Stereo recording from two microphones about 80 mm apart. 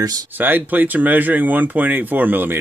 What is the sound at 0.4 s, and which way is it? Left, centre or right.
Speech, right.